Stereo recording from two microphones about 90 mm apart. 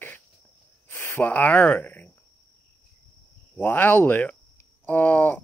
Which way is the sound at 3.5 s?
25° left (ahead or behind).